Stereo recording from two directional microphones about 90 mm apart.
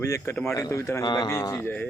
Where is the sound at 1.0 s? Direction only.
50° left (ahead or behind).